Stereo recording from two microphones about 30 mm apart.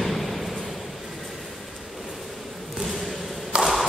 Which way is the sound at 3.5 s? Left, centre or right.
Right.